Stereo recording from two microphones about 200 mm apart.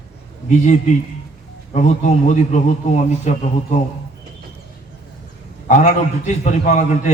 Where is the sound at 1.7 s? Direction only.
35° left (ahead or behind).